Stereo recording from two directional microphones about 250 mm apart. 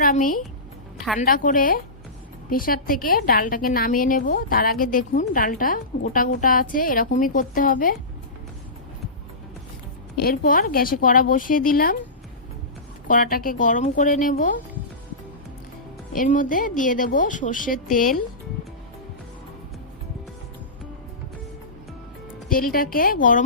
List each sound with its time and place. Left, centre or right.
0.0 s a woman's voice: left
10.2 s a woman's voice: left
13.1 s a woman's voice: left
16.1 s a woman's voice: left
22.4 s a woman's voice: left